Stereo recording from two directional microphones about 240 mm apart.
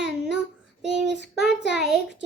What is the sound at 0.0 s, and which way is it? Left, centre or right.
Child singing, centre.